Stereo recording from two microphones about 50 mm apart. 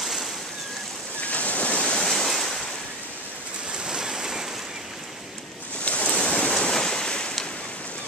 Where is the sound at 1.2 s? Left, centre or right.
Left.